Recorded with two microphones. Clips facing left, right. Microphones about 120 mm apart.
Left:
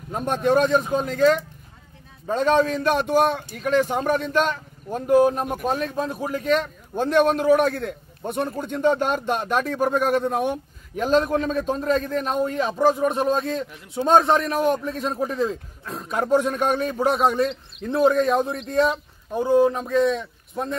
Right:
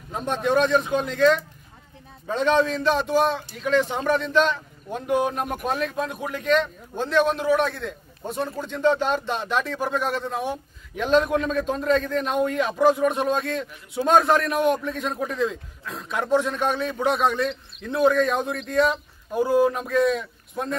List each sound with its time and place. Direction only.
0.1 s a man's voice: 50° left (ahead or behind)
2.2 s a man's voice: 40° left (ahead or behind)
11.0 s a man's voice: 40° left (ahead or behind); by 19.8 s 20° left (ahead or behind)
20.2 s speech: centre (ahead or behind)